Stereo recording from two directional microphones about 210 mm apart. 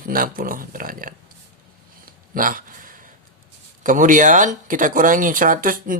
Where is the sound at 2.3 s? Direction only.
40° right (ahead or behind).